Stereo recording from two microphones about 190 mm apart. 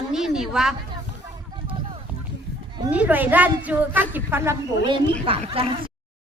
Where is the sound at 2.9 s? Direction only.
10° right (ahead or behind).